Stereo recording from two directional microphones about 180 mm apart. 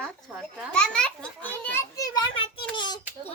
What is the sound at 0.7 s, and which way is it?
A child's voice, 5° left (ahead or behind).